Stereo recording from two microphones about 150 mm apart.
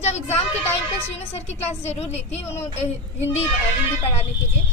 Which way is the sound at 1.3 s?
45° left (ahead or behind).